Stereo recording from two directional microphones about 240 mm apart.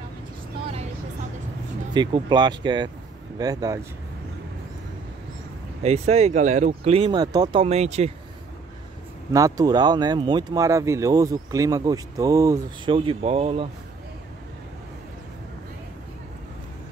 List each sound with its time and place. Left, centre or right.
2.0 s speech: centre
5.8 s speech: right
9.3 s speech: centre